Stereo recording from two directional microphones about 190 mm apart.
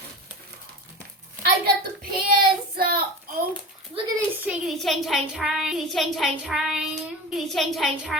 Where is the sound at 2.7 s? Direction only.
50° right (ahead or behind).